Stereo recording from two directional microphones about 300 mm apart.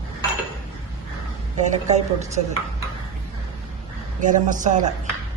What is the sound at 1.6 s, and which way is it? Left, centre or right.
Speech, right.